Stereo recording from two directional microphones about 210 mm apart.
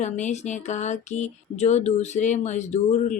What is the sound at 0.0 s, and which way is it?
Speech, 35° left (ahead or behind).